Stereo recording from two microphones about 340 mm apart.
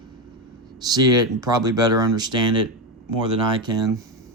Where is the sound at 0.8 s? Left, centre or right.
Centre.